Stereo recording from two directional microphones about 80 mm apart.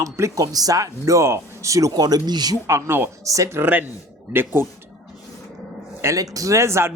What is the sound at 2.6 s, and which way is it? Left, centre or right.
Speech, right.